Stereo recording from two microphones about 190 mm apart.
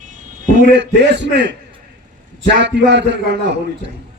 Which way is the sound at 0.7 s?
65° right (ahead or behind).